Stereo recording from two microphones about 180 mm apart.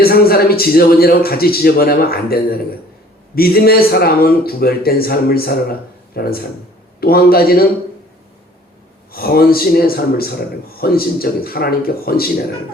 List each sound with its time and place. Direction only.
0.0 s a man's voice: 55° left (ahead or behind)
9.1 s a man's voice: 55° left (ahead or behind)